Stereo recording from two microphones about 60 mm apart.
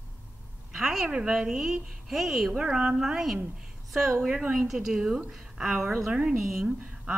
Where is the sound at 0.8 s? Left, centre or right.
Centre.